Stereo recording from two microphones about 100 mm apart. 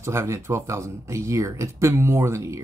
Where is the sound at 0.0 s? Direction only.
30° right (ahead or behind).